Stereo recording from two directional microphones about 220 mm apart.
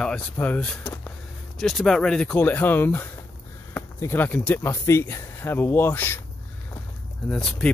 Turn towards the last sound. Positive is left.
turn(degrees=5)  # may be behind; listen again after turning